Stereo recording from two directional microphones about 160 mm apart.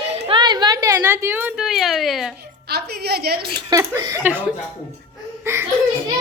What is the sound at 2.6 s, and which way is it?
Speech, 80° right.